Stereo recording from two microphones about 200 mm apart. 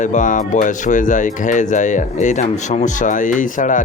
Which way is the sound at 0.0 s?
40° left (ahead or behind).